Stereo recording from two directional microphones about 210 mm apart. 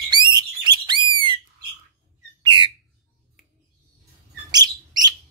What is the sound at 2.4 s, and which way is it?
Bird, 25° right (ahead or behind).